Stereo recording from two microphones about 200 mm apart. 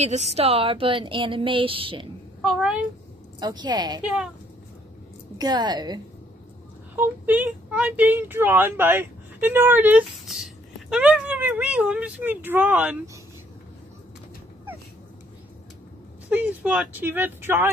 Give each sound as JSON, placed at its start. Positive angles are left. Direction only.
{"t": 0.0, "sound": "a woman's voice", "side_deg": -35}
{"t": 2.4, "sound": "a woman's voice", "side_deg": 0}
{"t": 3.3, "sound": "a woman's voice", "side_deg": -20}
{"t": 4.0, "sound": "a woman's voice", "side_deg": -5}
{"t": 5.4, "sound": "a woman's voice", "side_deg": -20}
{"t": 7.0, "sound": "speech", "side_deg": -10}
{"t": 16.3, "sound": "speech", "side_deg": -5}